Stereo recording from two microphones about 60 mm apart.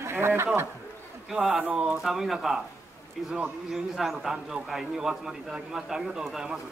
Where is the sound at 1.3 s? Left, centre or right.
Centre.